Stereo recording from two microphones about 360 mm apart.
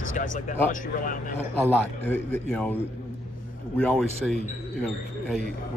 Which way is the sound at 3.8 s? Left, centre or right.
Centre.